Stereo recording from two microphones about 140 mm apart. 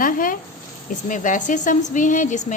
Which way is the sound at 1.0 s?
65° left (ahead or behind).